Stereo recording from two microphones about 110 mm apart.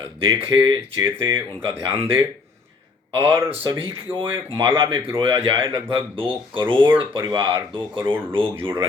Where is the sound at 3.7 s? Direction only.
50° right (ahead or behind).